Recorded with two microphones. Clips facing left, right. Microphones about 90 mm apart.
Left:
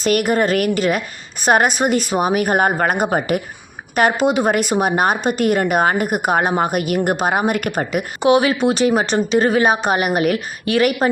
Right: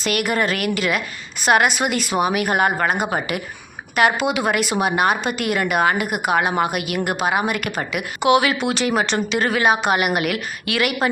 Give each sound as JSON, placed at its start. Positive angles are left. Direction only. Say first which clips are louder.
{"t": 0.0, "sound": "a woman's voice", "louder": "left 4 dB", "side_deg": 40}